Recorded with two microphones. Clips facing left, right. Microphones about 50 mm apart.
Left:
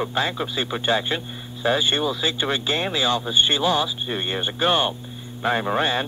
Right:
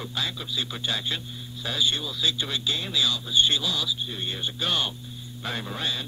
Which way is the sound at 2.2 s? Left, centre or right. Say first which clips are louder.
Left 4 dB; left.